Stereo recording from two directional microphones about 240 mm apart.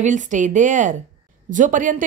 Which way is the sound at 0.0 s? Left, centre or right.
Right.